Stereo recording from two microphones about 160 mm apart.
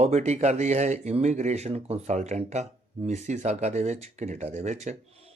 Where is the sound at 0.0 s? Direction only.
45° right (ahead or behind).